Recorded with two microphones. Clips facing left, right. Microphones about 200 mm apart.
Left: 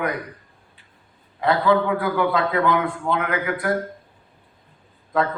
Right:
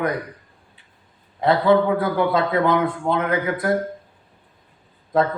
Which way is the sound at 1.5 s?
25° right (ahead or behind).